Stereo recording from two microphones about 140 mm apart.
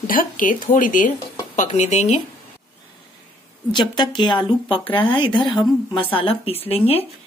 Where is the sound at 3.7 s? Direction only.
35° left (ahead or behind).